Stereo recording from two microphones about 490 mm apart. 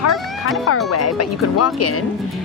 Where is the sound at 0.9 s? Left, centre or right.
Left.